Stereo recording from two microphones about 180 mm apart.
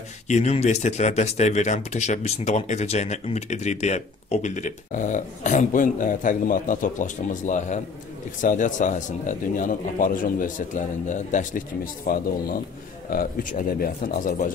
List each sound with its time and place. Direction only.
0.3 s speech: 40° left (ahead or behind)
13.1 s speech: 50° left (ahead or behind)